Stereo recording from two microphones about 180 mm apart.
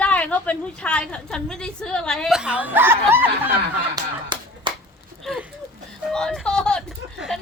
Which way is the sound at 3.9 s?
25° right (ahead or behind).